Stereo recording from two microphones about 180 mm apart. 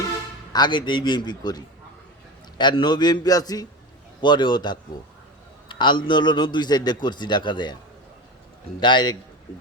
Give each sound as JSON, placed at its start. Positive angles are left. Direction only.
{"t": 0.5, "sound": "a man's voice", "side_deg": 25}
{"t": 8.8, "sound": "a man's voice", "side_deg": 25}